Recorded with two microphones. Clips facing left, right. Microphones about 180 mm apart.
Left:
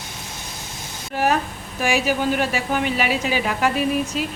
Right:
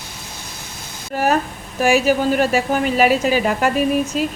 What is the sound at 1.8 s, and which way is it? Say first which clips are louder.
A woman's voice: right 5 dB; 45° right (ahead or behind).